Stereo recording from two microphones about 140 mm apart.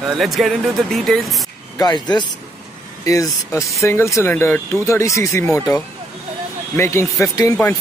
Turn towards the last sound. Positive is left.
turn(degrees=20)  # may be behind; listen again after turning